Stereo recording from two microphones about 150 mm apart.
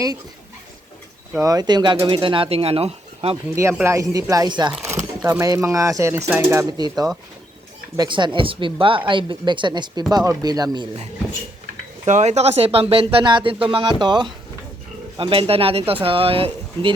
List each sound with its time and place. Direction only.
1.4 s speech: 25° right (ahead or behind); by 3.3 s 40° right (ahead or behind)
3.5 s speech: 20° right (ahead or behind)
6.7 s speech: 25° right (ahead or behind)
12.0 s speech: 50° right (ahead or behind)